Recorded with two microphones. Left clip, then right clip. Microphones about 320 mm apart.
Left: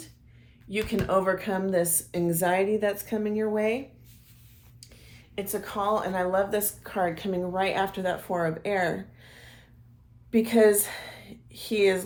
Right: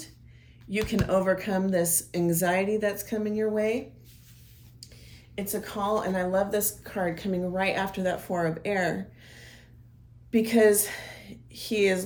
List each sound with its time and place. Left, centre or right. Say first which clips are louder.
0.7 s a woman's voice: even; centre
4.8 s a woman's voice: right 1 dB; centre